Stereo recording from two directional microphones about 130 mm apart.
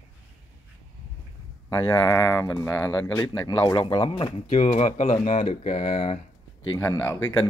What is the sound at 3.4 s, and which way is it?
Speech, 40° left (ahead or behind).